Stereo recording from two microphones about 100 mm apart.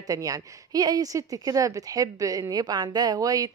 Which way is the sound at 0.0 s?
35° right (ahead or behind).